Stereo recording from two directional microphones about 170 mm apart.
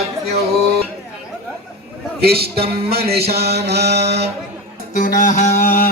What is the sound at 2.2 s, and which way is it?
Mantra, 65° right (ahead or behind).